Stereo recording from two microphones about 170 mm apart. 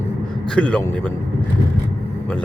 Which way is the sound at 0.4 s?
5° left (ahead or behind).